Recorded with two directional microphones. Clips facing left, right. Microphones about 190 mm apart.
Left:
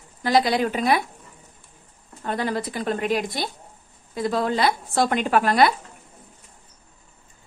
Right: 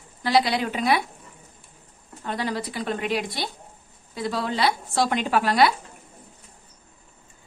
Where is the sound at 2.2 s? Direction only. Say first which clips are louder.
Left 3 dB; 50° left (ahead or behind).